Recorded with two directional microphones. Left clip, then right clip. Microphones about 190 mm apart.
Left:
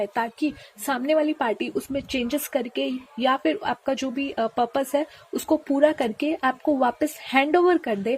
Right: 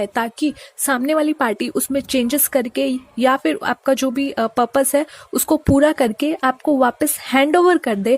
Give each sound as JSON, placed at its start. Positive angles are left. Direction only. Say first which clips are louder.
{"t": 0.0, "sound": "a woman's voice", "louder": "right 5 dB", "side_deg": -40}